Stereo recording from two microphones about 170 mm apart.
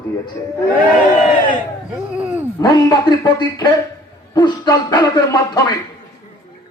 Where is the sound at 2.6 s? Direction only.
25° left (ahead or behind).